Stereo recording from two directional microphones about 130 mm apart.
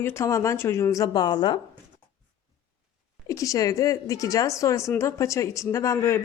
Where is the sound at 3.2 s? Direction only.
25° left (ahead or behind).